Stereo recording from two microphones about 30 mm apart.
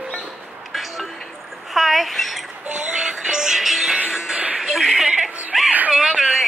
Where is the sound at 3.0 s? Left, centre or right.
Right.